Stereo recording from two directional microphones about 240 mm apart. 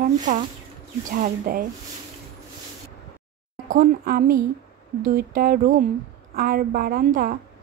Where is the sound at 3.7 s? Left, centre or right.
Right.